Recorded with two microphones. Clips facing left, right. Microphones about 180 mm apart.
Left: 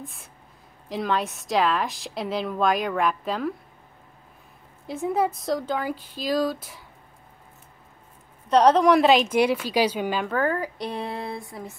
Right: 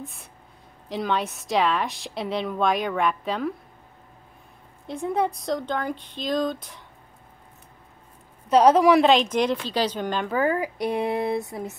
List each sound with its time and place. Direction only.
0.0 s a woman's voice: centre (ahead or behind)
4.8 s a woman's voice: 5° left (ahead or behind)
8.5 s a woman's voice: 5° right (ahead or behind)
10.3 s speech: 10° right (ahead or behind)